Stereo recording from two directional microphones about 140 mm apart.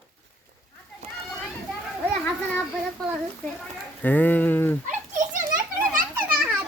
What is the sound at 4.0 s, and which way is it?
Speech, 10° left (ahead or behind).